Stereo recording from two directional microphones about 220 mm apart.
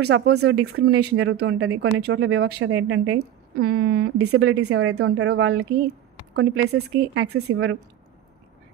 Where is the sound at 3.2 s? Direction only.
45° right (ahead or behind).